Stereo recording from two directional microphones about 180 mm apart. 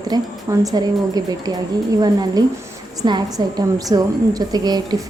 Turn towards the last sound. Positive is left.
turn(degrees=-20)  # may be behind; listen again after turning